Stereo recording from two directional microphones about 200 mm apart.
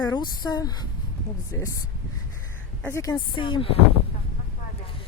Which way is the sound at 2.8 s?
10° left (ahead or behind).